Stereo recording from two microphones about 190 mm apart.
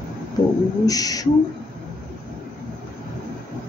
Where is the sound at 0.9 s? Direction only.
20° left (ahead or behind).